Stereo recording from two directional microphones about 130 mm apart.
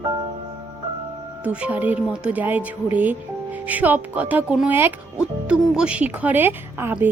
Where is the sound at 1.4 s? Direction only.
10° right (ahead or behind).